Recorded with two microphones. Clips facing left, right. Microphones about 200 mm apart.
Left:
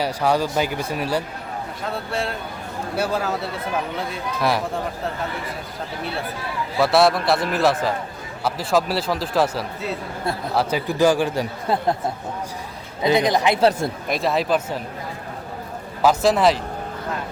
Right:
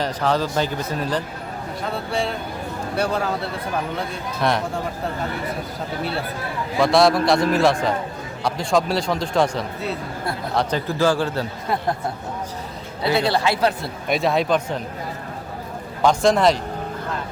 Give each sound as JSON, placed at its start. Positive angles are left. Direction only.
{"t": 0.0, "sound": "a man's voice", "side_deg": 10}
{"t": 6.7, "sound": "a man's voice", "side_deg": 5}
{"t": 13.0, "sound": "a man's voice", "side_deg": 15}
{"t": 14.1, "sound": "a man's voice", "side_deg": 0}
{"t": 16.0, "sound": "a man's voice", "side_deg": 5}